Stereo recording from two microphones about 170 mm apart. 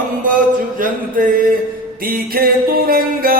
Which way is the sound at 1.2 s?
55° right (ahead or behind).